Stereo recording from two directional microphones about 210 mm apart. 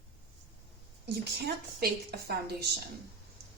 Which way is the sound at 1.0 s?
50° right (ahead or behind).